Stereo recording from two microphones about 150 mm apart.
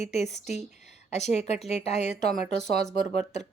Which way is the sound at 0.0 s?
45° left (ahead or behind).